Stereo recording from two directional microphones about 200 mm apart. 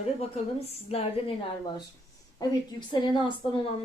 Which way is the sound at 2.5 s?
20° left (ahead or behind).